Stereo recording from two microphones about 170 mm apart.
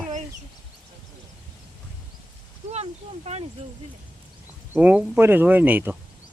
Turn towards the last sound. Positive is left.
turn(degrees=-10)  # may be behind; listen again after turning